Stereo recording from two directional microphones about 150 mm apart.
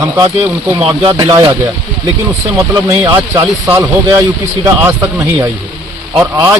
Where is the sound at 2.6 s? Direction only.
20° right (ahead or behind).